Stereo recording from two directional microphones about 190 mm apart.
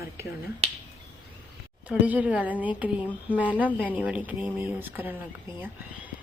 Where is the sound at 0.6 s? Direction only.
35° right (ahead or behind).